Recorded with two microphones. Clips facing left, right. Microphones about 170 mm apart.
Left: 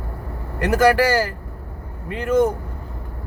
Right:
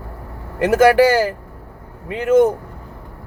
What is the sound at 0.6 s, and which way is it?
Speech, 20° right (ahead or behind).